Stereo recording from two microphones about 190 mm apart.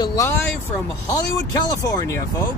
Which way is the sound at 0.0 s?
20° left (ahead or behind).